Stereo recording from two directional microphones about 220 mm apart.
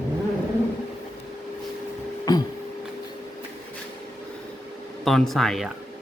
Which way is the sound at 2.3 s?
15° left (ahead or behind).